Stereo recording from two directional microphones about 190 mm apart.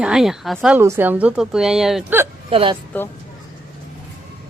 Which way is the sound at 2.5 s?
30° right (ahead or behind).